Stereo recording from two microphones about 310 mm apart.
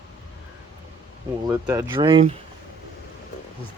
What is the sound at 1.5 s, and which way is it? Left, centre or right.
Speech, centre.